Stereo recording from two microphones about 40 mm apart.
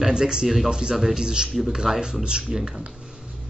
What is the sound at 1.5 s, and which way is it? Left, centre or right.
Speech, centre.